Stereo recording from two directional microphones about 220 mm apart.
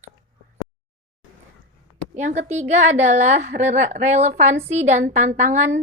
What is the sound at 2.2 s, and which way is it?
A woman's voice, 30° right (ahead or behind).